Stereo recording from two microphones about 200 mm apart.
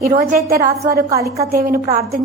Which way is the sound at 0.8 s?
15° right (ahead or behind).